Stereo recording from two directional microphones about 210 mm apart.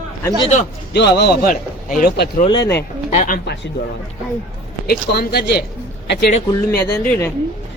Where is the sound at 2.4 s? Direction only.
20° left (ahead or behind).